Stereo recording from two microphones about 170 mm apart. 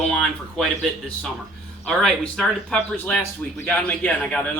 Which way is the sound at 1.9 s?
5° left (ahead or behind).